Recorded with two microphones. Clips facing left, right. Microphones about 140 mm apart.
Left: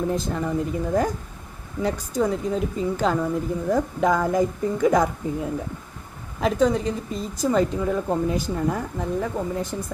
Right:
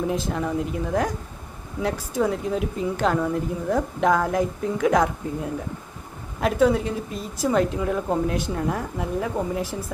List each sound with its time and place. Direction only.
0.1 s a woman's voice: centre (ahead or behind)